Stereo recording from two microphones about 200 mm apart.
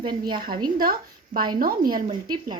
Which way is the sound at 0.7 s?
45° right (ahead or behind).